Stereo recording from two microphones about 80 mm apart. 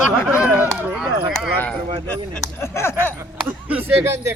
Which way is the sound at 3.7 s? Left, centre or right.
Right.